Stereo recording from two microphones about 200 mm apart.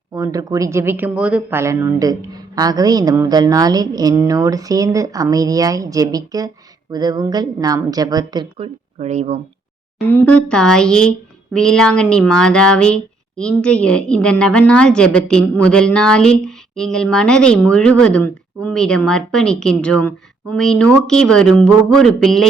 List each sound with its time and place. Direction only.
0.1 s a woman's voice: 15° right (ahead or behind); by 9.4 s 35° right (ahead or behind)
10.1 s speech: 10° left (ahead or behind)